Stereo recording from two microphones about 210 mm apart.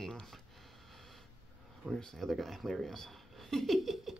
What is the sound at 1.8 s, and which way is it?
Speech, 5° left (ahead or behind).